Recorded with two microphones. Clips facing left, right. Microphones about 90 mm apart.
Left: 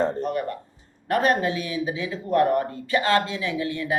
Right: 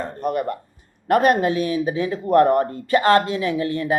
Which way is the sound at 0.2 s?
45° right (ahead or behind).